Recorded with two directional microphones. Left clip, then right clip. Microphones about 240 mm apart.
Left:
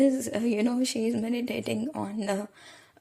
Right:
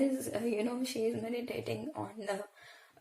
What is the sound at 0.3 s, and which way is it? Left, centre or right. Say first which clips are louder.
A woman's voice: left 6 dB; left.